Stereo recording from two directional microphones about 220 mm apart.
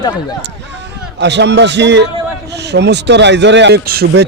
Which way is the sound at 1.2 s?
50° right (ahead or behind).